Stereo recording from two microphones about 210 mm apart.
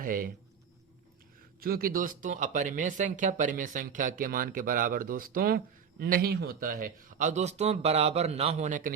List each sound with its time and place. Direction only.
0.0 s speech: 40° right (ahead or behind)
1.6 s speech: 45° right (ahead or behind)